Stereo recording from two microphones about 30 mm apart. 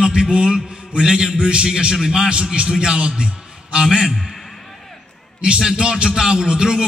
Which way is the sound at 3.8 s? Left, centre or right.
Right.